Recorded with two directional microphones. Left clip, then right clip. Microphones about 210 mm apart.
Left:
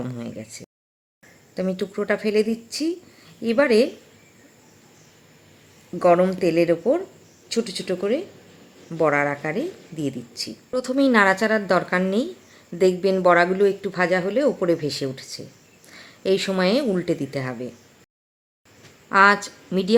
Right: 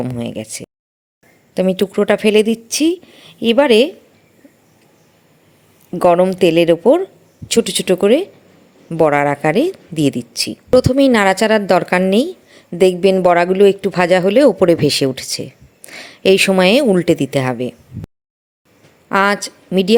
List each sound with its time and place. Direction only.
0.0 s a woman's voice: 30° right (ahead or behind)
6.0 s a woman's voice: 30° right (ahead or behind)
19.0 s a woman's voice: 30° right (ahead or behind)